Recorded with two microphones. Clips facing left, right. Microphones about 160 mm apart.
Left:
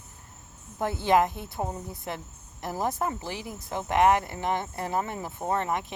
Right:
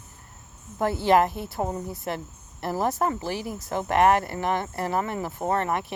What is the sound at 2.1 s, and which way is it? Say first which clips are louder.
Speech: right 5 dB; 65° right (ahead or behind).